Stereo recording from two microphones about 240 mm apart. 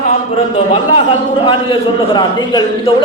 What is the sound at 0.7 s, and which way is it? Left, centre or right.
A man's voice, left.